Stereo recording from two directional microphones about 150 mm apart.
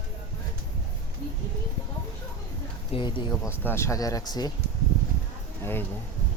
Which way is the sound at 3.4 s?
15° left (ahead or behind).